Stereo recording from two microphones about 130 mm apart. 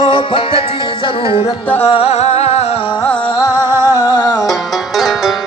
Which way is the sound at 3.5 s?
20° right (ahead or behind).